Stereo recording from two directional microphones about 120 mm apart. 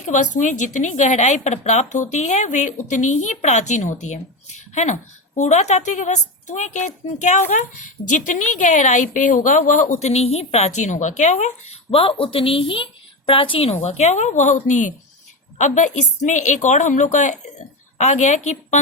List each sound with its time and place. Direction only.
0.0 s a woman's voice: 90° left
17.9 s speech: 70° left (ahead or behind)